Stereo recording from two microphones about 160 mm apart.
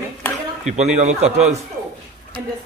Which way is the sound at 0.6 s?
45° right (ahead or behind).